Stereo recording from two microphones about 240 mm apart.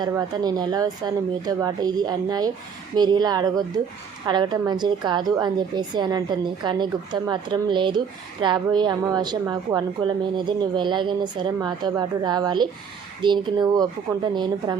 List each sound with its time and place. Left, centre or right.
0.0 s a woman's voice: centre